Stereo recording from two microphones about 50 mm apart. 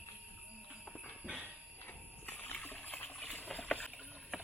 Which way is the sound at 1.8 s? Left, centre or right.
Left.